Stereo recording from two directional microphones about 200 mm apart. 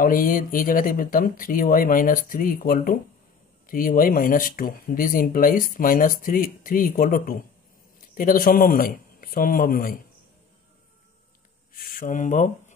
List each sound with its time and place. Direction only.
0.0 s speech: 45° left (ahead or behind)
11.7 s speech: 45° left (ahead or behind)